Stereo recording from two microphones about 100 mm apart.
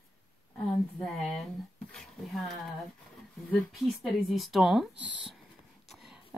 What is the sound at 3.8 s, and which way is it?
Speech, centre (ahead or behind).